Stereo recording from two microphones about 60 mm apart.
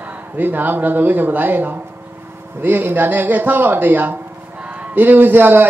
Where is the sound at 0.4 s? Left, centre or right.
Right.